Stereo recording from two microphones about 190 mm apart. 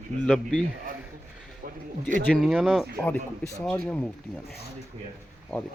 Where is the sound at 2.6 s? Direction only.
5° left (ahead or behind).